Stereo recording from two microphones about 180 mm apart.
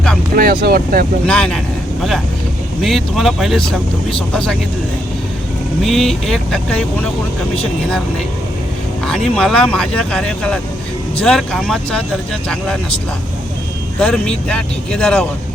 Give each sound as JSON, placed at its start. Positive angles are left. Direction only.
{"t": 0.3, "sound": "speech", "side_deg": -55}
{"t": 1.3, "sound": "speech", "side_deg": 5}
{"t": 2.8, "sound": "speech", "side_deg": 0}
{"t": 5.8, "sound": "speech", "side_deg": 0}
{"t": 9.0, "sound": "speech", "side_deg": 5}
{"t": 14.0, "sound": "speech", "side_deg": 5}